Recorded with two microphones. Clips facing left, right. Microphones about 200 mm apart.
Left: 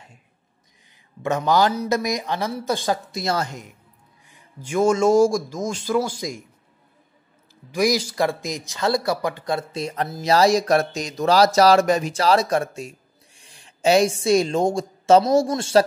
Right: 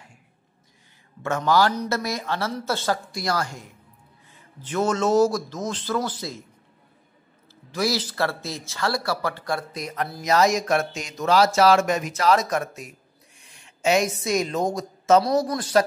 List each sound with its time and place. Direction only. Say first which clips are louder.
1.2 s a man's voice: left 2 dB; 15° left (ahead or behind)
7.7 s a woman's voice: left 4 dB; 15° left (ahead or behind)